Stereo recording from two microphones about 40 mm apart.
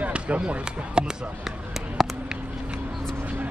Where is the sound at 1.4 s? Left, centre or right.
Centre.